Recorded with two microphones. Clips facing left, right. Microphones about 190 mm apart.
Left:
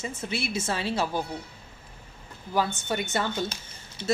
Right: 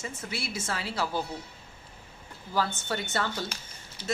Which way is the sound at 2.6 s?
15° left (ahead or behind).